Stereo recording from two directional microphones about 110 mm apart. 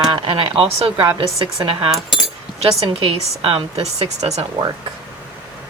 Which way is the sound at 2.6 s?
50° right (ahead or behind).